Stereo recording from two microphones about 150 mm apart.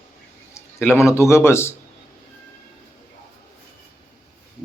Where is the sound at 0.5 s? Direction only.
15° left (ahead or behind).